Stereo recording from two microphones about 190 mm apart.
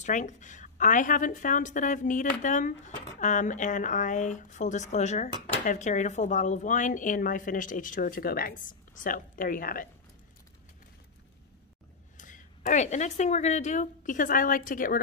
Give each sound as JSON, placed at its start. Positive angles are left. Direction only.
{"t": 0.0, "sound": "a woman's voice", "side_deg": 40}
{"t": 12.2, "sound": "speech", "side_deg": 40}